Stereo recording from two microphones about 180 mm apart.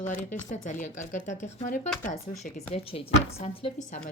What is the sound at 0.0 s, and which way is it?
A woman's voice, 45° left (ahead or behind).